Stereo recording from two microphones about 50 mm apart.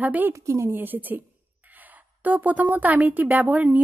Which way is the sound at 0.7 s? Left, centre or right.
Right.